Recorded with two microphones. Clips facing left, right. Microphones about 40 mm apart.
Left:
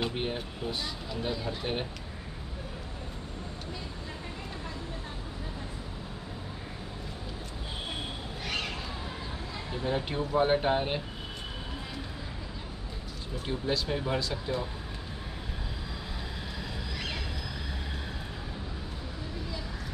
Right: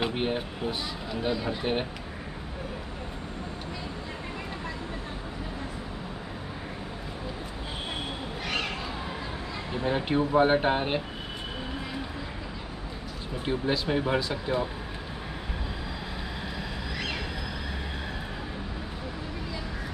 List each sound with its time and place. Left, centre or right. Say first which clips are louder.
0.0 s speech: right 4 dB; centre
8.5 s squawk: right 3 dB; right
9.7 s speech: right 4 dB; right
13.5 s speech: right 4 dB; centre